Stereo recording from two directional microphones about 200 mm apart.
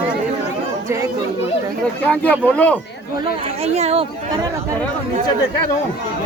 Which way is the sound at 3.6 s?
35° right (ahead or behind).